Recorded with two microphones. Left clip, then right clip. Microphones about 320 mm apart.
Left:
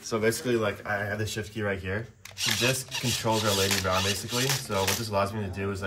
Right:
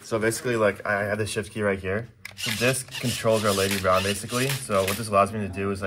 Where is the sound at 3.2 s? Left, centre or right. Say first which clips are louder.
Right 5 dB; centre.